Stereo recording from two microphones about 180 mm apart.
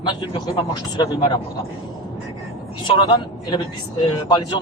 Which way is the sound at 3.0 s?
25° left (ahead or behind).